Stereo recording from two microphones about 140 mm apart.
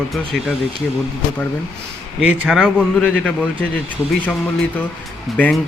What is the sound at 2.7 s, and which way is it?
Speech, 5° left (ahead or behind).